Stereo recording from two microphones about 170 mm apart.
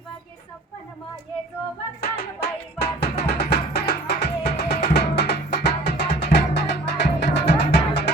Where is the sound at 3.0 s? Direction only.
75° left (ahead or behind).